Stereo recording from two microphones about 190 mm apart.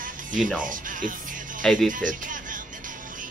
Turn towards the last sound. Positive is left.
turn(degrees=-45)  # may be behind; listen again after turning